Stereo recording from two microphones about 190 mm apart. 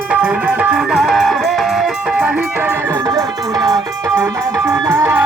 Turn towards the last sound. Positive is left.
turn(degrees=-10)  # may be behind; listen again after turning